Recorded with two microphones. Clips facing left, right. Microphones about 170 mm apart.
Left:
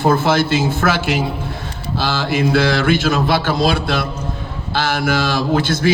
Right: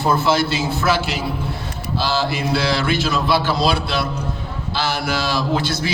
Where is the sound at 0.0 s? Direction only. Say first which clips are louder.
Left 3 dB; 50° left (ahead or behind).